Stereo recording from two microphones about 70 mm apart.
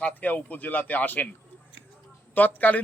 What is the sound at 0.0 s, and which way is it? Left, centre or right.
Speech, left.